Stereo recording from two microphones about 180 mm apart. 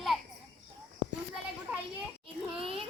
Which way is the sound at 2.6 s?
30° right (ahead or behind).